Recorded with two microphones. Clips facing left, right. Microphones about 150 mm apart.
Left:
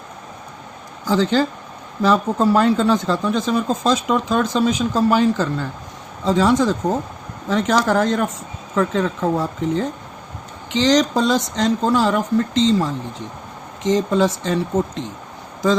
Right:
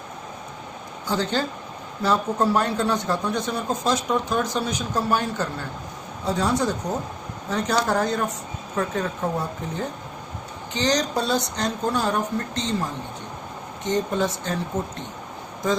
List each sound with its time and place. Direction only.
1.0 s speech: 90° left